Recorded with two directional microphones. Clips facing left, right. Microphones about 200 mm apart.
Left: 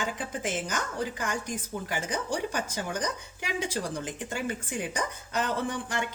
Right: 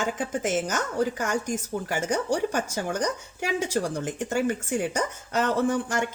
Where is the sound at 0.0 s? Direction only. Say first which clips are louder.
Right 5 dB; 45° right (ahead or behind).